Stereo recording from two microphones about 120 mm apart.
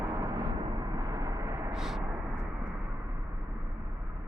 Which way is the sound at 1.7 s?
Centre (ahead or behind).